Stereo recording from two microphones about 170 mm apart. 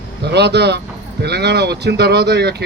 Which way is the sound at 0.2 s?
75° right (ahead or behind).